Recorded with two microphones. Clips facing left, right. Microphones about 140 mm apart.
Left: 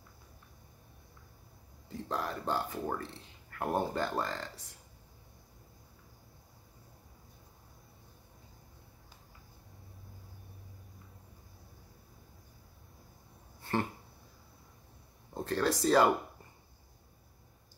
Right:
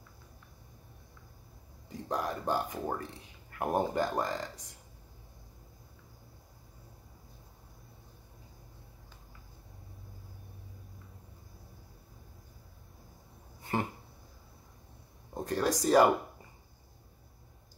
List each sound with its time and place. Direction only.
1.9 s a man's voice: 15° right (ahead or behind)
13.6 s a sound: 15° right (ahead or behind)
15.3 s a man's voice: 15° right (ahead or behind)